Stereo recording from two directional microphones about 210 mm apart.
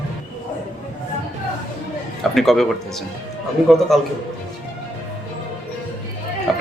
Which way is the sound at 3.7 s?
Centre (ahead or behind).